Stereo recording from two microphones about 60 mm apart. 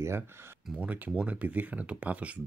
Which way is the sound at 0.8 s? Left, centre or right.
Right.